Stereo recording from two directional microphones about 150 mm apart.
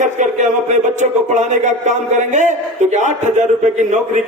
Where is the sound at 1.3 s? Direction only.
50° right (ahead or behind).